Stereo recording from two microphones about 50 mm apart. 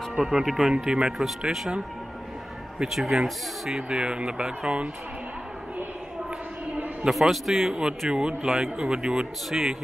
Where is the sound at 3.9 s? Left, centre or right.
Centre.